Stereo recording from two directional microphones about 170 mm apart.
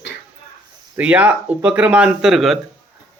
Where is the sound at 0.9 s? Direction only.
10° right (ahead or behind).